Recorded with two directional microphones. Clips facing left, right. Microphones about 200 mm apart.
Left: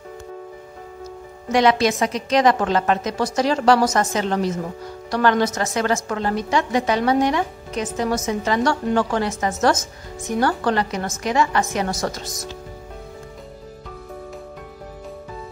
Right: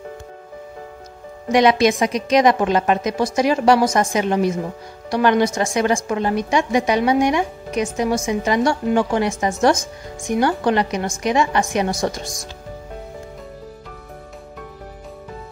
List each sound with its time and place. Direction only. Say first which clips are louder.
1.5 s a woman's voice: right 2 dB; 15° right (ahead or behind)